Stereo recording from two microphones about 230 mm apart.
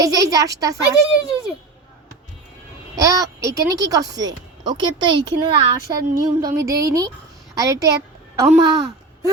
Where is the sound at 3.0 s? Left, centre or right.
Centre.